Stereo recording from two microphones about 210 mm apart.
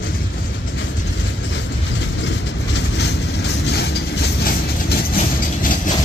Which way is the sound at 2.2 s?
55° left (ahead or behind).